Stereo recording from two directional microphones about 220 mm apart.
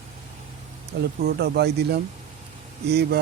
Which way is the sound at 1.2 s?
45° right (ahead or behind).